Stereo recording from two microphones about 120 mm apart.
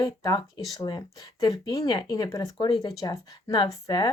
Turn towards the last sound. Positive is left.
turn(degrees=35)  # may be behind; listen again after turning